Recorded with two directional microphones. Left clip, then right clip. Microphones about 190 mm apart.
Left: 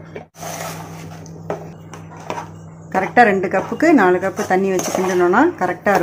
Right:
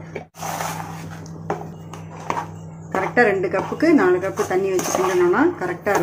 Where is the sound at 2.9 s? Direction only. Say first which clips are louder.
Left 4 dB; 35° left (ahead or behind).